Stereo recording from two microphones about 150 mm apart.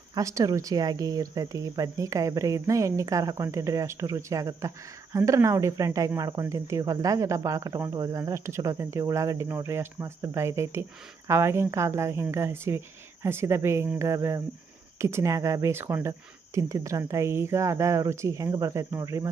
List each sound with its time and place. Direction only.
0.1 s speech: 20° right (ahead or behind)